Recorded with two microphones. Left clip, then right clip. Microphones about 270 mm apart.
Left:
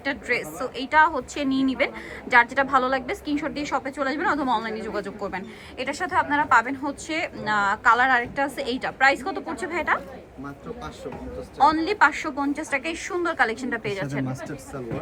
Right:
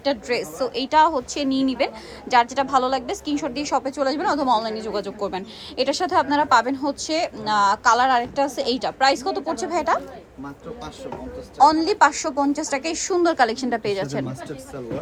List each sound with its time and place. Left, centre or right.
0.0 s a woman's voice: centre
11.5 s a woman's voice: centre
13.1 s a woman's voice: centre